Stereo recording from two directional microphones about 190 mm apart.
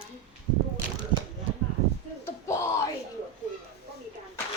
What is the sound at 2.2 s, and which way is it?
Yell, 15° left (ahead or behind).